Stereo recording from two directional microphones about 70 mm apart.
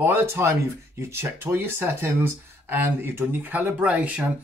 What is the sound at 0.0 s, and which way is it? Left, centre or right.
Speech, right.